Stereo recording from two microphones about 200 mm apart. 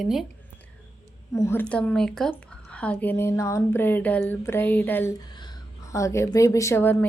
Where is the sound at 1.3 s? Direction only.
15° left (ahead or behind).